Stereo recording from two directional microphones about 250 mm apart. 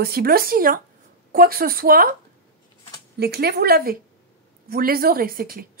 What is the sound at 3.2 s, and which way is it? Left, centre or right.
Speech, right.